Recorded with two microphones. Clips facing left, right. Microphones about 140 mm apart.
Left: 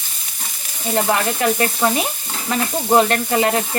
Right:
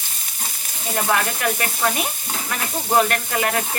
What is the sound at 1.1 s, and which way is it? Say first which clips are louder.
Sizzle: left 1 dB; 25° left (ahead or behind).